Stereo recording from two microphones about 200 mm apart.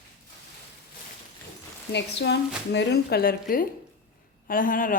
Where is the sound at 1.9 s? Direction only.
60° left (ahead or behind).